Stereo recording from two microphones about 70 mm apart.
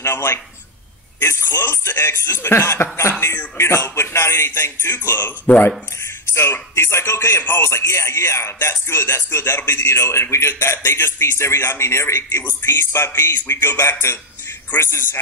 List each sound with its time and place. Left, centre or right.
0.0 s speech: left
6.3 s speech: left